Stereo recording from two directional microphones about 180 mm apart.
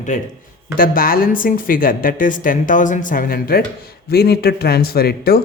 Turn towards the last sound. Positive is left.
turn(degrees=60)  # may be behind; listen again after turning